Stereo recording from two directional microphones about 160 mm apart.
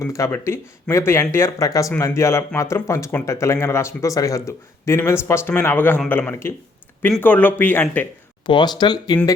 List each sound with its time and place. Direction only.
0.0 s speech: 20° left (ahead or behind)
8.4 s speech: 25° left (ahead or behind)